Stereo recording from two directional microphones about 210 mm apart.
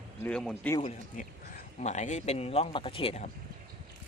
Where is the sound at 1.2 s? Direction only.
35° left (ahead or behind).